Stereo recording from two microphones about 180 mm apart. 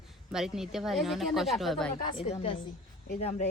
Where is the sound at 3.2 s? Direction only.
35° left (ahead or behind).